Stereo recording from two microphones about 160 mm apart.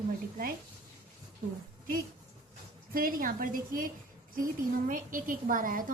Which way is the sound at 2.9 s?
65° right (ahead or behind).